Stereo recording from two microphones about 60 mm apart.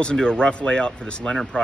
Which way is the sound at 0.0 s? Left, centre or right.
Centre.